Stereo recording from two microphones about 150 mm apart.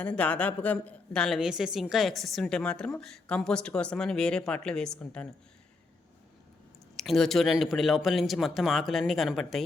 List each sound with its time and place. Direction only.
0.0 s a woman's voice: 10° left (ahead or behind)
6.9 s a woman's voice: centre (ahead or behind)